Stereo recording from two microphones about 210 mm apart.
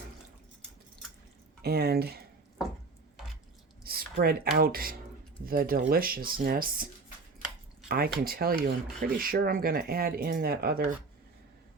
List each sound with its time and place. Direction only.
1.6 s speech: 50° right (ahead or behind)
3.8 s speech: 45° right (ahead or behind)
7.9 s speech: 45° right (ahead or behind)